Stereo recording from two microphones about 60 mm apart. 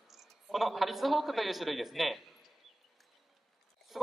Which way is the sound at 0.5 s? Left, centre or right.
Centre.